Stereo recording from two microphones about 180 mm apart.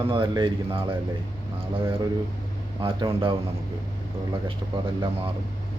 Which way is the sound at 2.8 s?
30° right (ahead or behind).